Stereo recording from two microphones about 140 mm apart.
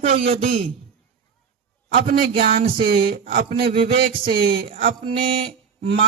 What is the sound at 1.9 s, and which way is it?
Speech, 90° right.